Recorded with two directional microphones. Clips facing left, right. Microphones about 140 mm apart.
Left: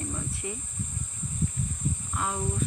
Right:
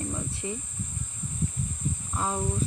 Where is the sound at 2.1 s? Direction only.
30° right (ahead or behind).